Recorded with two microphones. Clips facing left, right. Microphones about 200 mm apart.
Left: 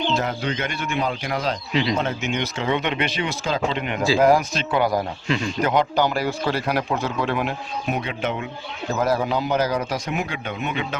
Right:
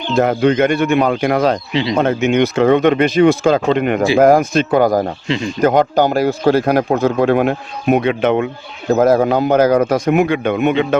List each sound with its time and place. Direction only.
0.1 s a man's voice: 55° right (ahead or behind)
1.7 s speech: 25° right (ahead or behind)
2.0 s speech: 55° right (ahead or behind)
8.9 s a man's voice: 50° right (ahead or behind); by 10.8 s 65° right (ahead or behind)